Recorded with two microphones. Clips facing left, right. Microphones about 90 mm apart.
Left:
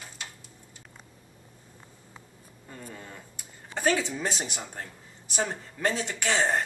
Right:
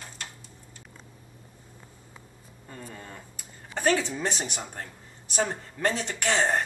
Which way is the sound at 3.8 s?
5° left (ahead or behind).